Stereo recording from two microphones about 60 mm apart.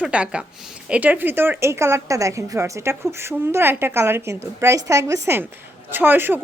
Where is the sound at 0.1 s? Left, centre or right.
Centre; by 2.1 s right.